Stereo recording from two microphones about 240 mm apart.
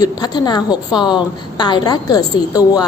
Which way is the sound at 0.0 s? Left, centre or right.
Centre.